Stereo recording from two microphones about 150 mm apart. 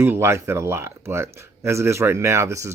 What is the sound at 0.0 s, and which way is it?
Speech, 15° right (ahead or behind).